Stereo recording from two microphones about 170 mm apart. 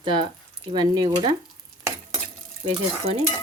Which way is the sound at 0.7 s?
25° right (ahead or behind).